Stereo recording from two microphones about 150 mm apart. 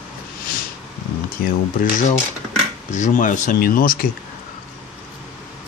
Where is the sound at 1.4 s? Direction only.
65° left (ahead or behind).